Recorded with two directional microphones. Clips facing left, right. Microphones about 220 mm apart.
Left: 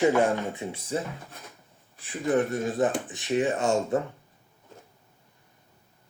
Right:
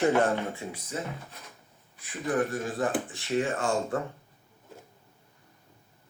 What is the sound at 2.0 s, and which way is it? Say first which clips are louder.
A man's voice: left 3 dB; 25° left (ahead or behind).